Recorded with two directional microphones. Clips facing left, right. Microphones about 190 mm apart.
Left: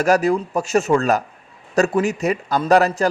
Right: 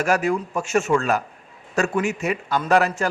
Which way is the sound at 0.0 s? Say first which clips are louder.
Left 4 dB; 35° left (ahead or behind).